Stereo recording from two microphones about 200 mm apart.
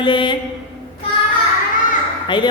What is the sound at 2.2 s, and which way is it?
Speech, 20° left (ahead or behind).